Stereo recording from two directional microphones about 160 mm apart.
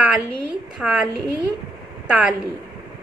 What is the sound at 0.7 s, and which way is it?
Speech, 5° right (ahead or behind).